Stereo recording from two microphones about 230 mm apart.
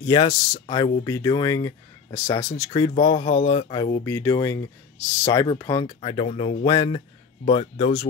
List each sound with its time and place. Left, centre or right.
0.0 s speech: centre